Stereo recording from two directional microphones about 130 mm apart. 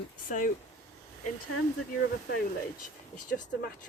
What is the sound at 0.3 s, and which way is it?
Speech, 90° left.